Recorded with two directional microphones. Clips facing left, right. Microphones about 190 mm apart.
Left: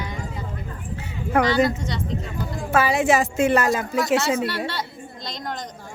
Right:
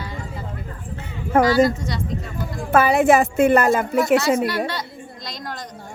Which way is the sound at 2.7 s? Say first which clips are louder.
Right 4 dB; 55° right (ahead or behind).